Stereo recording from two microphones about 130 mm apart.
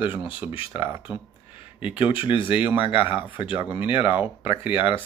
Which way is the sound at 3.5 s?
20° right (ahead or behind).